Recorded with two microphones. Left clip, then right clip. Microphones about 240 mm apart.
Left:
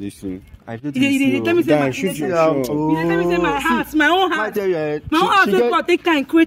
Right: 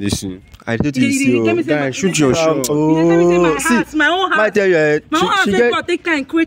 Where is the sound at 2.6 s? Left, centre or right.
Right.